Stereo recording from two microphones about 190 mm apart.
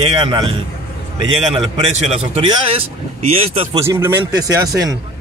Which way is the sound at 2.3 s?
30° right (ahead or behind).